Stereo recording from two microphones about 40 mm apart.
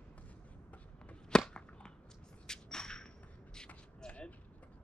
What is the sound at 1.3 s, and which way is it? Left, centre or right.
Whip, centre.